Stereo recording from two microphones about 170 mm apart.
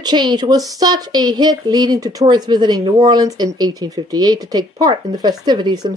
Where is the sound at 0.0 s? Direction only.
25° right (ahead or behind).